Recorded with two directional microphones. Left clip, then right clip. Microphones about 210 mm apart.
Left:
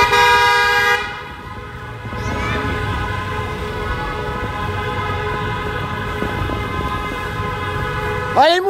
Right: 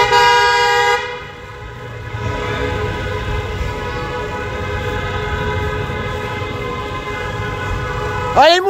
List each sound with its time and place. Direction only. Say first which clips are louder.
0.1 s vehicle: right 1 dB; 10° right (ahead or behind)
8.4 s speech: right 3 dB; centre (ahead or behind)